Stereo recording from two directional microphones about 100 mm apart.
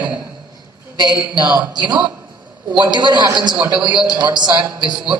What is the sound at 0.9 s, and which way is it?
A woman's voice, 45° right (ahead or behind).